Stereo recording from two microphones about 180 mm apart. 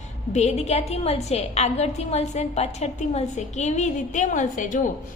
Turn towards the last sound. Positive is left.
turn(degrees=45)  # may be behind; listen again after turning